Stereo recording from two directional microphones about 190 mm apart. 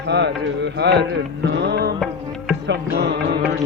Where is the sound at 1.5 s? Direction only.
60° right (ahead or behind).